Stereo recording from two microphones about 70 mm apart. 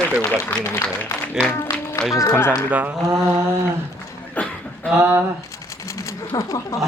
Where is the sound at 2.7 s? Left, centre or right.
Right.